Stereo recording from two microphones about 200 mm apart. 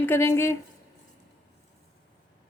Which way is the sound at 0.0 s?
10° left (ahead or behind).